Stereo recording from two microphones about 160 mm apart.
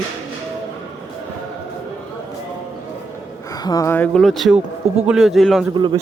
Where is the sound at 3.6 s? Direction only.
20° left (ahead or behind); by 5.6 s centre (ahead or behind).